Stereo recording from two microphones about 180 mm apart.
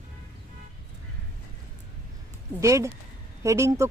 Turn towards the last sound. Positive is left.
turn(degrees=-15)  # may be behind; listen again after turning